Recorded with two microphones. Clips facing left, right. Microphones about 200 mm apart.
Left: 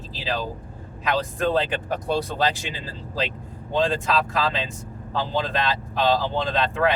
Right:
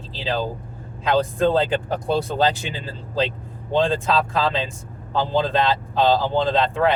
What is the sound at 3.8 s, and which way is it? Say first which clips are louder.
Speech: right 3 dB; 25° right (ahead or behind).